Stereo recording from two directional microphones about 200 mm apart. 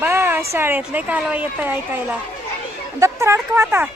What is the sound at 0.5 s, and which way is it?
Speech, 10° right (ahead or behind).